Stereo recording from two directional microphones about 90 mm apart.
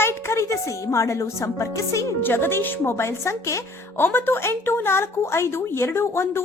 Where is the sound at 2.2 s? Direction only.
25° left (ahead or behind).